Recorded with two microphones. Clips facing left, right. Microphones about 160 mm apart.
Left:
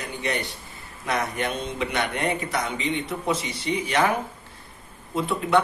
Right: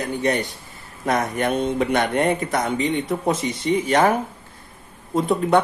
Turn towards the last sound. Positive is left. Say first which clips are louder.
# right 4 dB
turn(degrees=-45)  # may be behind; listen again after turning